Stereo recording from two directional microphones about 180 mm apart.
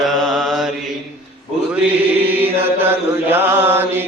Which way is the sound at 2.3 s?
10° right (ahead or behind).